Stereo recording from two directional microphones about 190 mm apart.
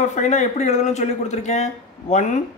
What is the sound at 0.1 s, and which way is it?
Speech, 40° left (ahead or behind).